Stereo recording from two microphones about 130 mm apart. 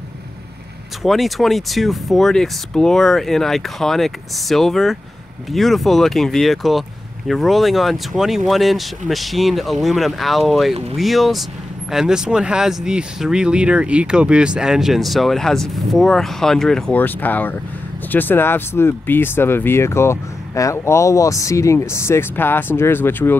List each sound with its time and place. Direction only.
1.0 s speech: centre (ahead or behind); by 23.3 s 15° left (ahead or behind)